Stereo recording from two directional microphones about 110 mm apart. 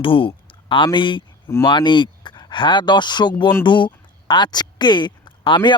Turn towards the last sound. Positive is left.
turn(degrees=45)  # may be behind; listen again after turning